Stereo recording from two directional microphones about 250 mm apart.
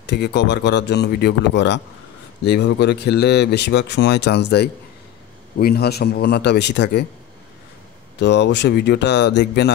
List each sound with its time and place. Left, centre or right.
0.0 s a man's voice: left
8.2 s a man's voice: left